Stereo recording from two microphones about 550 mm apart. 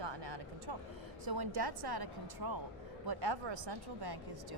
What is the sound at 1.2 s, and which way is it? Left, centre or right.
A woman's voice, right.